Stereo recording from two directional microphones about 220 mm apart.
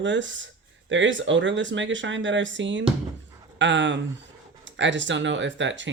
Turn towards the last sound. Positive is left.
turn(degrees=-55)  # may be behind; listen again after turning